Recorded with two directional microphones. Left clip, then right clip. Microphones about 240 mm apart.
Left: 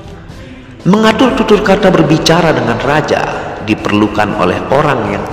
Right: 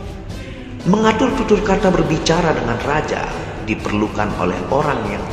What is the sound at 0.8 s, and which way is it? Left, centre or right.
A man's voice, left.